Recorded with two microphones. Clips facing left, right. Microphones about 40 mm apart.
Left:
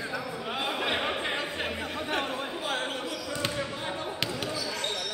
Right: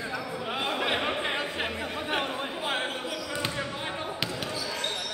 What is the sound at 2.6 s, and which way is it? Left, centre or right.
Basketball bounce, right.